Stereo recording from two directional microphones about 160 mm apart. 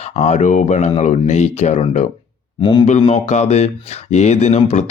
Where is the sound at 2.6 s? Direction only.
30° left (ahead or behind).